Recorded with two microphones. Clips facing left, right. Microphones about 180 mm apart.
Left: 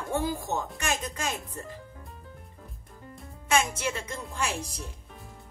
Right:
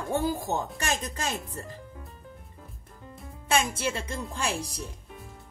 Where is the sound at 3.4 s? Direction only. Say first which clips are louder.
Even; 35° right (ahead or behind).